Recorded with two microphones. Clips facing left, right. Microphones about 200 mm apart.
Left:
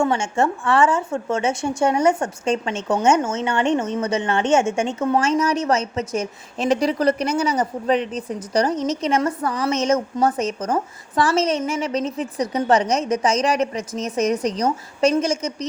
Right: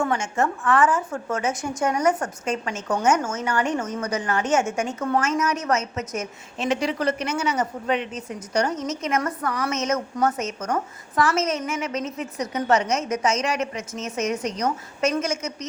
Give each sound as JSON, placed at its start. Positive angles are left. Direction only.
{"t": 0.0, "sound": "a woman's voice", "side_deg": 30}